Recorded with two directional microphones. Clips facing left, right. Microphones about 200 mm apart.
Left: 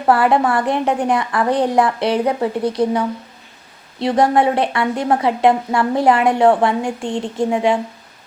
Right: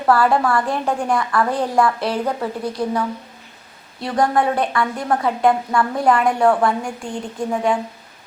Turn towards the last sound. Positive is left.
turn(degrees=25)  # may be behind; listen again after turning